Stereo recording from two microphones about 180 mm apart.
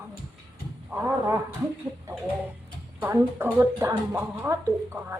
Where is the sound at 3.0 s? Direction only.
15° right (ahead or behind).